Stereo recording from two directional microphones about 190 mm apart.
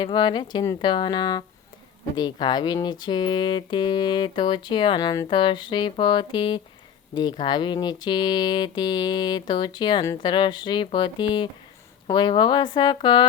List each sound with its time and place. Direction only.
0.0 s speech: 25° left (ahead or behind)